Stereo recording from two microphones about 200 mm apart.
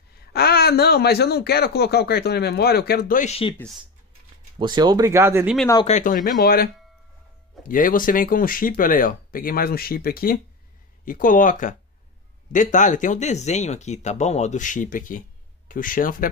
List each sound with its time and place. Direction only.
0.3 s speech: 50° left (ahead or behind); by 3.5 s 30° left (ahead or behind)
3.5 s speech: centre (ahead or behind)
4.6 s speech: 20° right (ahead or behind)
5.9 s speech: 40° left (ahead or behind)